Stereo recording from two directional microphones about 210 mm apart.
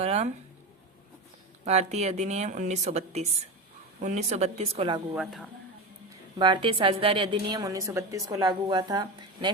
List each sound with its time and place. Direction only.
0.0 s a sound: 30° right (ahead or behind)
1.6 s speech: 30° right (ahead or behind)
5.1 s speech: centre (ahead or behind)
6.1 s a woman's voice: 20° right (ahead or behind)